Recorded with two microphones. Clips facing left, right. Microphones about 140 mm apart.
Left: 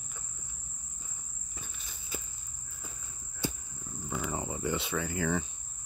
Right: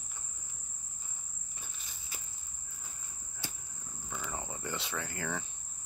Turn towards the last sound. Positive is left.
turn(degrees=0)  # may be behind; listen again after turning